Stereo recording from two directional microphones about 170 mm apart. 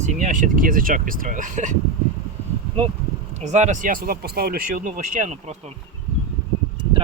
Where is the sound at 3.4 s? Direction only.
45° right (ahead or behind).